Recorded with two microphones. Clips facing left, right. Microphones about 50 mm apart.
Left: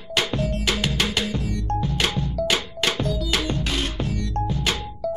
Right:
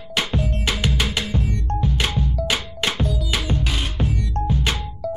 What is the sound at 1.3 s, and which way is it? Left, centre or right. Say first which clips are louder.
Music: right 1 dB; right.